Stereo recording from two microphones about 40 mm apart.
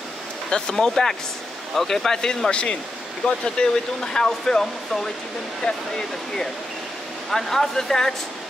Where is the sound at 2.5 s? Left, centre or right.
Left.